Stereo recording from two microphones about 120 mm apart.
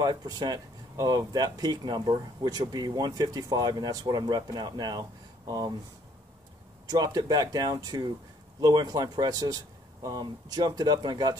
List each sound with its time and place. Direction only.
0.0 s speech: 35° right (ahead or behind)
6.9 s speech: 35° right (ahead or behind)